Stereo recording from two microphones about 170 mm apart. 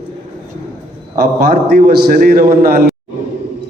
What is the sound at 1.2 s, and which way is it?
A man's voice, 60° right (ahead or behind).